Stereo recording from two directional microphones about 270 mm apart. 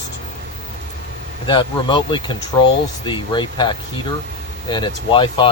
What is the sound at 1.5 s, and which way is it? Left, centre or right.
Speech, centre.